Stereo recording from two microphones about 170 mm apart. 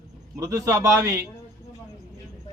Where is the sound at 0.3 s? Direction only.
20° right (ahead or behind).